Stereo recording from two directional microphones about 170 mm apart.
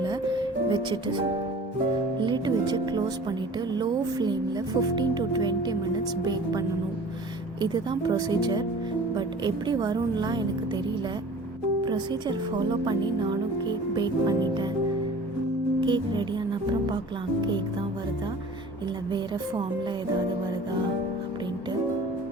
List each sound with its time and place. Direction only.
0.0 s music: 25° right (ahead or behind)
2.2 s speech: 25° right (ahead or behind)
11.9 s speech: 25° right (ahead or behind)
15.8 s speech: 25° right (ahead or behind)